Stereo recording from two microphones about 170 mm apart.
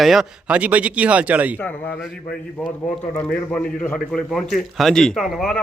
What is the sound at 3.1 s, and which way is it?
A man's voice, 10° left (ahead or behind).